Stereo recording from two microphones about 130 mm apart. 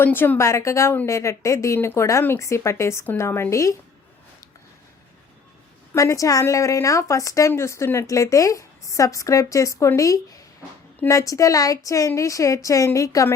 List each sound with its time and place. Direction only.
0.0 s a woman's voice: 15° left (ahead or behind)
5.9 s a woman's voice: 25° left (ahead or behind)